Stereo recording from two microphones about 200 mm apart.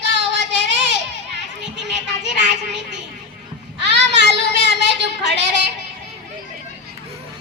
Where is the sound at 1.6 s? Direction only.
60° right (ahead or behind).